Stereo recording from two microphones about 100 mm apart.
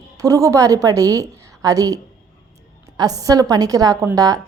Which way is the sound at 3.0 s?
40° right (ahead or behind).